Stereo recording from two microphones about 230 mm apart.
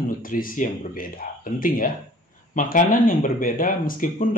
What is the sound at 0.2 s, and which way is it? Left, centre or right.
Speech, left.